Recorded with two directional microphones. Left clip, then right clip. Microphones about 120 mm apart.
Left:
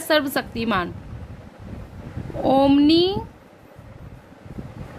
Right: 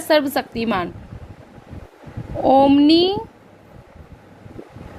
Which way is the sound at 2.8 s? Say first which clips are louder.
Right 3 dB; 15° right (ahead or behind).